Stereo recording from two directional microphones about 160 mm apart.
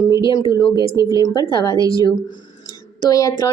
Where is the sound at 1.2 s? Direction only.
25° left (ahead or behind).